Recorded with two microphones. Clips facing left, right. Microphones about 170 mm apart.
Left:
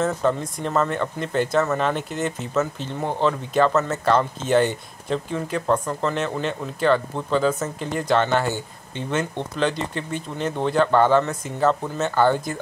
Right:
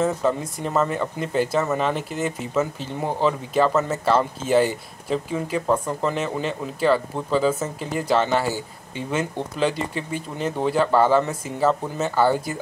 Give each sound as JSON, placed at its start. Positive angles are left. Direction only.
{"t": 0.0, "sound": "speech", "side_deg": -5}